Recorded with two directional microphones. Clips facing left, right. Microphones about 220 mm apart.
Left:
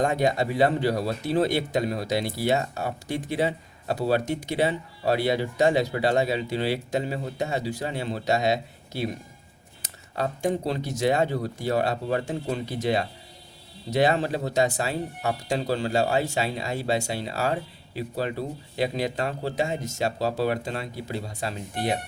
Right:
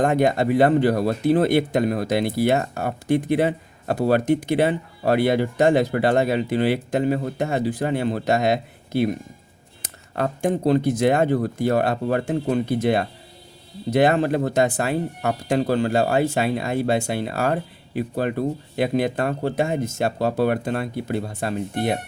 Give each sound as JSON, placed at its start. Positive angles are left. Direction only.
{"t": 0.0, "sound": "speech", "side_deg": -55}